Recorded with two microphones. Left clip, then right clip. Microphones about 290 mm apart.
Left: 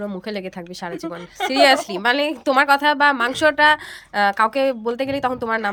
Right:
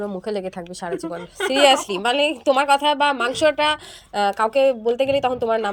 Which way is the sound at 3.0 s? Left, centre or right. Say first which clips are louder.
Left 2 dB; centre.